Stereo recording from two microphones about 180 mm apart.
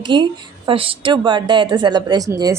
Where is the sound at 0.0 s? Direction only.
25° right (ahead or behind).